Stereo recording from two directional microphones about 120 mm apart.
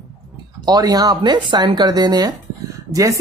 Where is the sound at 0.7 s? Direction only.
35° right (ahead or behind).